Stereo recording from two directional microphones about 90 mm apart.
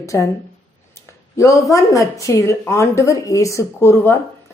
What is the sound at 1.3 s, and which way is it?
Speech, 35° left (ahead or behind).